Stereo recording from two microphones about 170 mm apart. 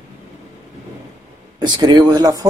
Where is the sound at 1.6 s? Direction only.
25° right (ahead or behind).